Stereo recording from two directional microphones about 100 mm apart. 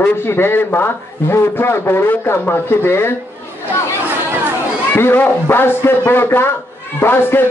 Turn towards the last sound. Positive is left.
turn(degrees=20)  # may be behind; listen again after turning